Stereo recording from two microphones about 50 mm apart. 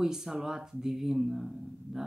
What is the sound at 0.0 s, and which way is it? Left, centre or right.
Speech, centre.